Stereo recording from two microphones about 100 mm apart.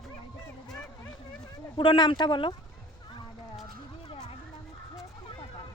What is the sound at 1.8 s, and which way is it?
Speech, 50° left (ahead or behind).